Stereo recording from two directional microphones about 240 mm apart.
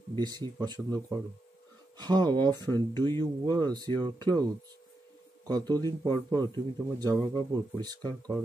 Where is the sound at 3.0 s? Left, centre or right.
Centre.